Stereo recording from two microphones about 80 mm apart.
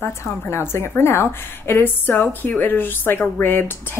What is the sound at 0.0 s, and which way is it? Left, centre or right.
A woman's voice, left.